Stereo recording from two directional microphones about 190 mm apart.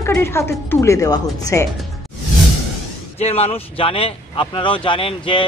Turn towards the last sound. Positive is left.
turn(degrees=25)  # may be behind; listen again after turning